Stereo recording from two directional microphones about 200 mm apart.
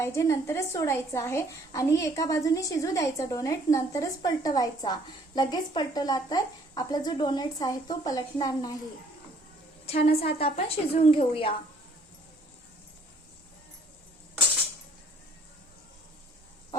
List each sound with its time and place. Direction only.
0.0 s a woman's voice: 15° left (ahead or behind)
9.8 s a woman's voice: 30° left (ahead or behind)